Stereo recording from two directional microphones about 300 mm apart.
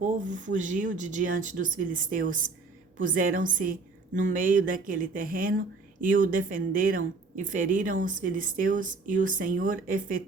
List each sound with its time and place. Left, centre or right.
0.0 s a woman's voice: right